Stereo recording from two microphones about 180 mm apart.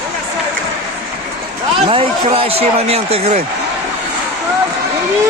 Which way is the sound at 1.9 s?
30° right (ahead or behind).